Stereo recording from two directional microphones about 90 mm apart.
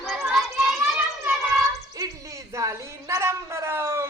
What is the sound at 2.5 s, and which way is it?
A woman's voice, 35° right (ahead or behind).